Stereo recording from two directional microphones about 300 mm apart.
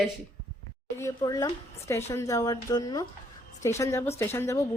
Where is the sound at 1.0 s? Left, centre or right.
Centre.